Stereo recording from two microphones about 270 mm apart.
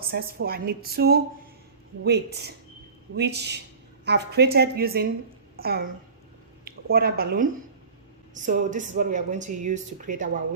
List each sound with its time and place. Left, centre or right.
0.1 s a woman's voice: right
6.9 s a woman's voice: right